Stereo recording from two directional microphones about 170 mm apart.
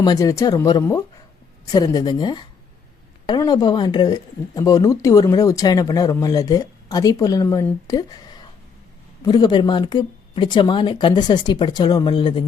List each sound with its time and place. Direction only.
0.0 s speech: 20° left (ahead or behind)